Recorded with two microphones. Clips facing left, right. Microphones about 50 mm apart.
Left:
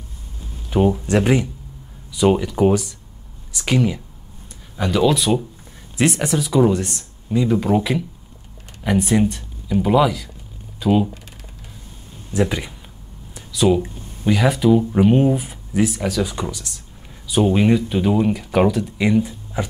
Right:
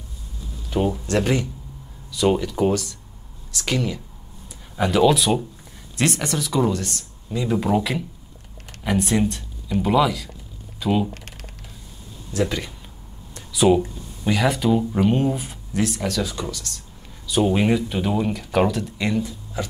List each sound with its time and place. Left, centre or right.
0.7 s speech: centre
4.7 s speech: centre
5.9 s speech: centre
6.8 s speech: left
7.3 s speech: centre
12.3 s speech: centre
13.5 s speech: centre
14.2 s speech: centre
17.5 s speech: centre
19.2 s speech: left